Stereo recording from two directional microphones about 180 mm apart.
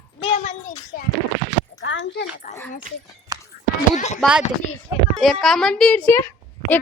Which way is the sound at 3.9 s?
40° left (ahead or behind).